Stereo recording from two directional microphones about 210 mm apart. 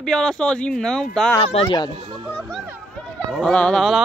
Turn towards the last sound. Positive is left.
turn(degrees=0)  # may be behind; listen again after turning